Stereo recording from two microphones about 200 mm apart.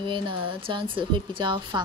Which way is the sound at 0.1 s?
25° right (ahead or behind).